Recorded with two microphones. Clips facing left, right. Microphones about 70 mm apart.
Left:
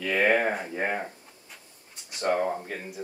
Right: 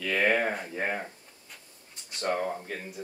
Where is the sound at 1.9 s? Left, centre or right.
Centre.